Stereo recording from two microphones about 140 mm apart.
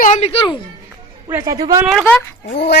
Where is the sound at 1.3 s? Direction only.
25° right (ahead or behind).